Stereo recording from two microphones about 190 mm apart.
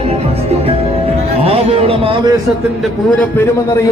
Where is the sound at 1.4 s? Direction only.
30° right (ahead or behind).